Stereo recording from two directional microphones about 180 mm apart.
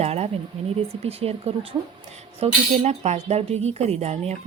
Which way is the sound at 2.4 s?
35° right (ahead or behind).